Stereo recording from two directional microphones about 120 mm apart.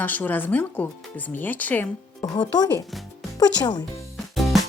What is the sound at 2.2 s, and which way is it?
Speech, 35° left (ahead or behind).